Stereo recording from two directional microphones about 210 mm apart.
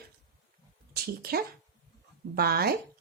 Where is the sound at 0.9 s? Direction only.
45° right (ahead or behind).